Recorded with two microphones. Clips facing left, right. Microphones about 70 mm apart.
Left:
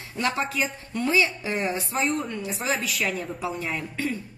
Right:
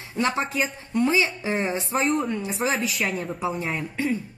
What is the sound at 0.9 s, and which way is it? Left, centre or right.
Speech, right.